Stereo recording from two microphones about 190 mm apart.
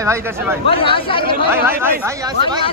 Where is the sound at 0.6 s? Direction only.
30° left (ahead or behind).